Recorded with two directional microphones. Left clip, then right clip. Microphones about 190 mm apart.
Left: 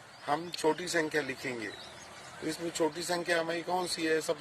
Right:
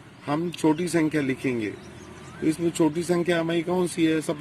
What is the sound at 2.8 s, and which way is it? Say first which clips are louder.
Speech: right 6 dB; 30° right (ahead or behind).